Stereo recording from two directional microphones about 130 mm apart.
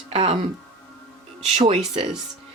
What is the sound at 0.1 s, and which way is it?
Music, 50° right (ahead or behind).